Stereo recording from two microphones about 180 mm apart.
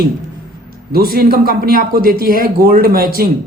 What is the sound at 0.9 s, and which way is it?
A woman's voice, 55° right (ahead or behind).